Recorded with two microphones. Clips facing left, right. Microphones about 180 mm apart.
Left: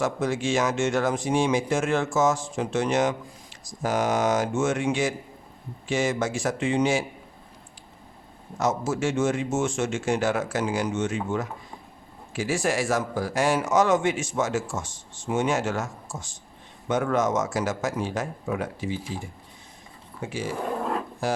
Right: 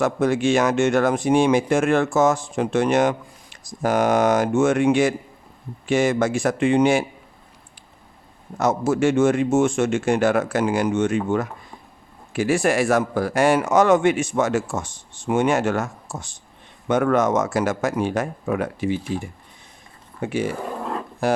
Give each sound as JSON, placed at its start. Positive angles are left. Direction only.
{"t": 0.0, "sound": "speech", "side_deg": -60}
{"t": 8.5, "sound": "speech", "side_deg": -60}
{"t": 20.7, "sound": "speech", "side_deg": 0}
{"t": 21.2, "sound": "speech", "side_deg": -60}